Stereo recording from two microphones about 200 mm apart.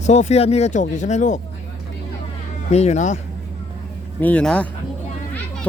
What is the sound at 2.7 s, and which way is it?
Speech, 35° left (ahead or behind).